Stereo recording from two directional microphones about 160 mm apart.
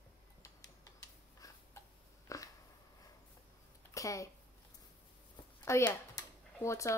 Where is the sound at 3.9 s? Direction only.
20° left (ahead or behind).